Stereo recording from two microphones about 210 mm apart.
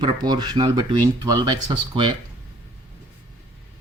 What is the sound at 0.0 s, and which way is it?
Speech, 20° right (ahead or behind).